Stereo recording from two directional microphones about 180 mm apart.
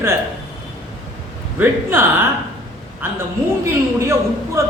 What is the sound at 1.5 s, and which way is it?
A man's voice, 10° right (ahead or behind).